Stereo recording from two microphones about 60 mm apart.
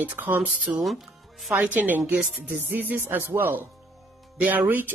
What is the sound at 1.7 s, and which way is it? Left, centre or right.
Speech, right.